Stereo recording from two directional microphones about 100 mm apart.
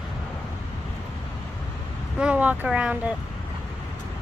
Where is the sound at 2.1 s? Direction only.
10° right (ahead or behind).